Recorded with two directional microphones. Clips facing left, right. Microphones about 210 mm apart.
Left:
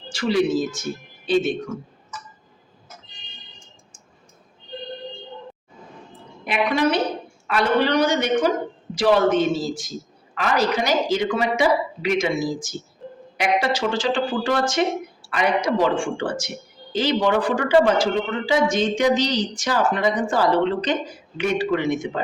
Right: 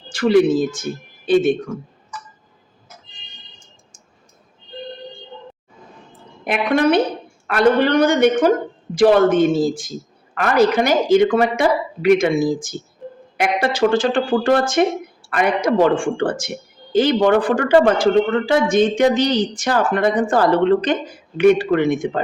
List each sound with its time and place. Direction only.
0.1 s speech: 55° right (ahead or behind)
6.4 s a woman's voice: 50° right (ahead or behind)